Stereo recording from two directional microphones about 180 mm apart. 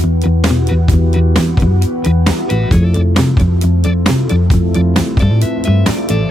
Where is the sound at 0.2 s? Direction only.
Centre (ahead or behind).